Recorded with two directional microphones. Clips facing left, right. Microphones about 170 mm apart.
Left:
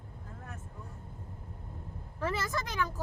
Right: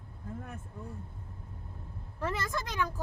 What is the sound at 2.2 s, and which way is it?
Speech, 5° left (ahead or behind).